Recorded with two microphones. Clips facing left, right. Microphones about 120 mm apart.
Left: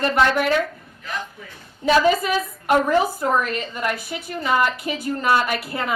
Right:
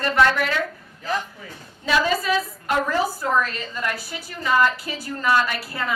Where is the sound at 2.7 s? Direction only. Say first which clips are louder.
Left 5 dB; 20° left (ahead or behind).